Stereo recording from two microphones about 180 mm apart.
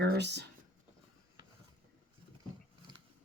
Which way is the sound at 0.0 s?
70° right (ahead or behind).